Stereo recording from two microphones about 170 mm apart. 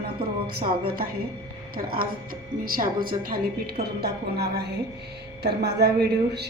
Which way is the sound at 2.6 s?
55° right (ahead or behind).